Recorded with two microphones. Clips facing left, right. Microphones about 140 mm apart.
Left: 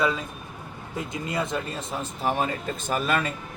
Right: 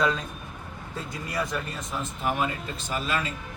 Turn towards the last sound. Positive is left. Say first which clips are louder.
# left 4 dB
turn(degrees=55)  # may be behind; listen again after turning